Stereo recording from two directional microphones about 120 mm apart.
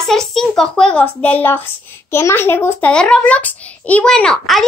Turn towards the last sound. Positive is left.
turn(degrees=5)  # may be behind; listen again after turning